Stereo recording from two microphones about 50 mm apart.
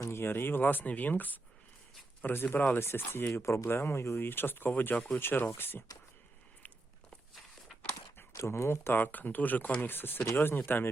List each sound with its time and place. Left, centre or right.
0.1 s speech: left
3.7 s speech: left
4.2 s speech: left
8.3 s speech: left
9.0 s speech: left